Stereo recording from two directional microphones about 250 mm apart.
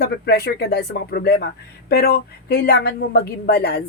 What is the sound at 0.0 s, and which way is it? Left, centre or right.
A woman's voice, left.